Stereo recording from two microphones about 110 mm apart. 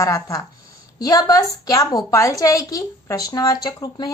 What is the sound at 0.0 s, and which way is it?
A woman's voice, 30° left (ahead or behind).